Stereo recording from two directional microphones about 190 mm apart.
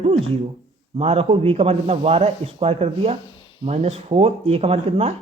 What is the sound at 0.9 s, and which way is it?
Speech, 30° right (ahead or behind).